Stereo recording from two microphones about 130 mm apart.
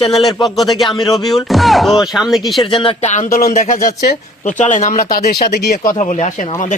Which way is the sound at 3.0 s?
65° left (ahead or behind).